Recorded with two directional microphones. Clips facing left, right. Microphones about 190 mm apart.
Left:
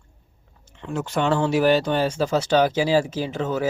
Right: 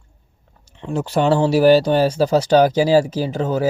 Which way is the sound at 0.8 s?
30° right (ahead or behind).